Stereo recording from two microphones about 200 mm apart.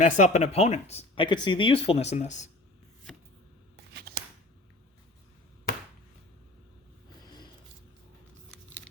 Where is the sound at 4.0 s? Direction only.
50° right (ahead or behind).